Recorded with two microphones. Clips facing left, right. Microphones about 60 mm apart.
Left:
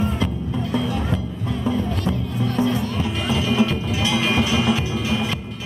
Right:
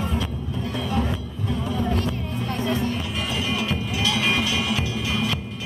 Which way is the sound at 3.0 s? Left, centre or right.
Left.